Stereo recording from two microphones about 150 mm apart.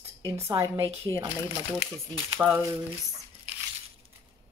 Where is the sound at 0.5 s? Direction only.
20° right (ahead or behind).